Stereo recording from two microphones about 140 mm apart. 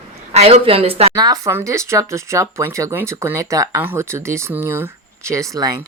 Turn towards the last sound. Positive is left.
turn(degrees=-25)  # may be behind; listen again after turning